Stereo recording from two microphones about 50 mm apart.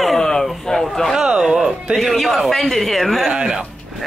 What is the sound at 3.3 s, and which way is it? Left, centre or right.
Speech, centre.